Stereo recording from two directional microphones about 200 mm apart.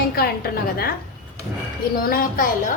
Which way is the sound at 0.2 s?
50° left (ahead or behind).